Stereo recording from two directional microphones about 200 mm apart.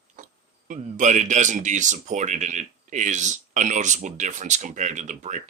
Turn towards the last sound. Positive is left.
turn(degrees=-35)  # may be behind; listen again after turning